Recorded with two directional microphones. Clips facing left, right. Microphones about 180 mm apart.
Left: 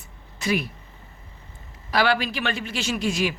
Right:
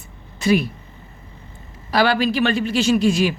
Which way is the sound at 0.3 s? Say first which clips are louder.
Right 7 dB; 30° right (ahead or behind).